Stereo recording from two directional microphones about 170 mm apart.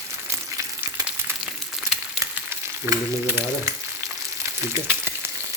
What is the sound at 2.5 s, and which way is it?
Frying, 15° right (ahead or behind).